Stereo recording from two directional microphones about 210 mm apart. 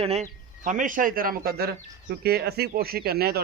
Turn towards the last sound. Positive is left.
turn(degrees=-45)  # may be behind; listen again after turning